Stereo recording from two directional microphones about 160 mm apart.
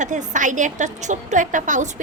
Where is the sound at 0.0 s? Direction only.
50° right (ahead or behind).